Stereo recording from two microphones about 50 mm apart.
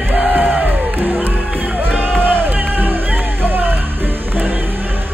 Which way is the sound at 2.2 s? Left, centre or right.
Right.